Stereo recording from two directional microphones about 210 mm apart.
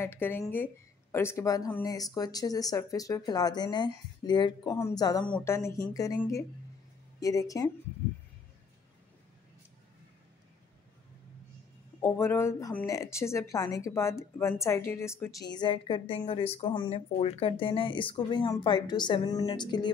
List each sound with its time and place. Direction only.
0.0 s speech: 10° left (ahead or behind)
12.0 s speech: 10° left (ahead or behind)